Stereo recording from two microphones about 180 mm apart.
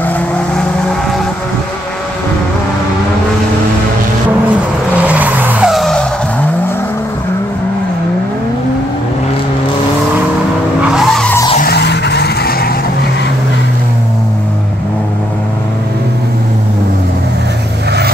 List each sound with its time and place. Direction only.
4.9 s vehicle: 10° right (ahead or behind)
10.9 s vehicle: centre (ahead or behind)
11.6 s vehicle: 65° left (ahead or behind)